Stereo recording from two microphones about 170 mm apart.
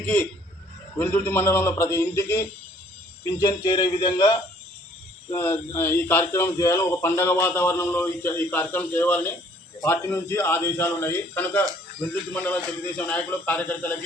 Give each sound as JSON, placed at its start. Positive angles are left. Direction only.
{"t": 0.0, "sound": "speech", "side_deg": 10}
{"t": 5.3, "sound": "speech", "side_deg": 15}